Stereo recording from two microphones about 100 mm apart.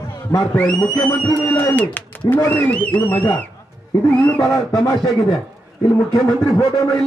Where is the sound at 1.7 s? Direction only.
20° left (ahead or behind).